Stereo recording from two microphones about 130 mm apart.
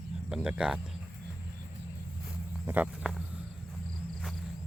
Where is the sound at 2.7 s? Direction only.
15° right (ahead or behind).